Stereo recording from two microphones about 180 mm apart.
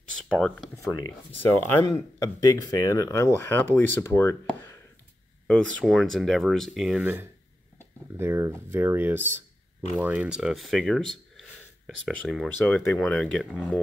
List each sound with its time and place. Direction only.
0.3 s speech: 5° left (ahead or behind)
0.7 s speech: 20° left (ahead or behind); by 13.7 s centre (ahead or behind)